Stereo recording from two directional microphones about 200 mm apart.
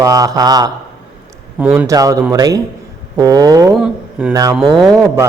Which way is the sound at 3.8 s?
5° right (ahead or behind).